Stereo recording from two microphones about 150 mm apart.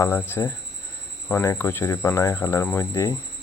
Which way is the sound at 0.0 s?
15° left (ahead or behind).